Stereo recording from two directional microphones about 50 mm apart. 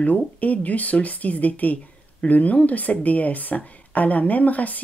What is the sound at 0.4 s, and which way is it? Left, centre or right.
A woman's voice, left.